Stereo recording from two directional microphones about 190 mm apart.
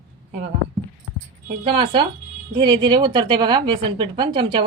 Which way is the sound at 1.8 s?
25° right (ahead or behind).